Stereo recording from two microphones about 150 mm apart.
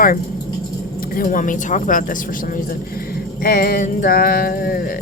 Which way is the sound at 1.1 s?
60° left (ahead or behind).